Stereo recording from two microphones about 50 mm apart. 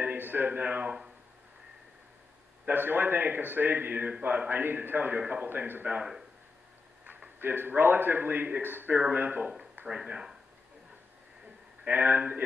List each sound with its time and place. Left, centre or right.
0.0 s speech: right
2.6 s a man's voice: right
7.3 s a man's voice: right
9.8 s a sound: right
11.9 s a man's voice: right